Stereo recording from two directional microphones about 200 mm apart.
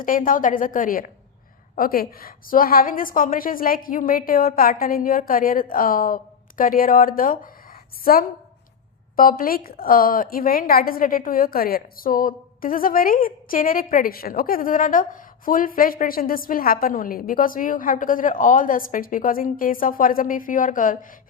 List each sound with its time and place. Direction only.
0.0 s a woman's voice: 45° left (ahead or behind)